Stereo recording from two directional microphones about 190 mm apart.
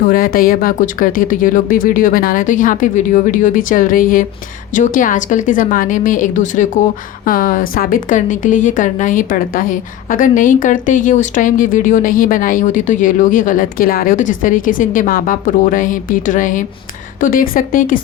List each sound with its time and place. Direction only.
0.0 s a woman's voice: 50° left (ahead or behind)